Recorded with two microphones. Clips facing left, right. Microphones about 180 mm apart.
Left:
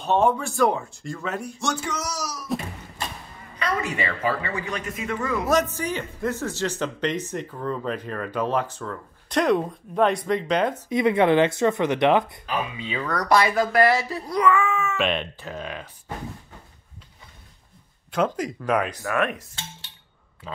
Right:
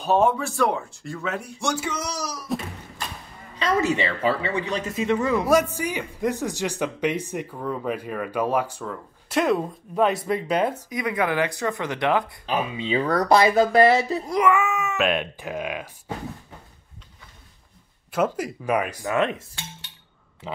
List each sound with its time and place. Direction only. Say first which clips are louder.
0.0 s speech: right 1 dB; centre (ahead or behind)
2.5 s a sound: even; centre (ahead or behind)
3.5 s speech: right 5 dB; 25° right (ahead or behind)
5.2 s speech: right 1 dB; 10° right (ahead or behind)
10.9 s speech: left 6 dB; 25° left (ahead or behind)
12.4 s speech: right 3 dB; 30° right (ahead or behind)
15.0 s speech: right 2 dB; 5° right (ahead or behind)
18.1 s speech: even; 5° right (ahead or behind)
19.1 s speech: right 2 dB; 25° right (ahead or behind)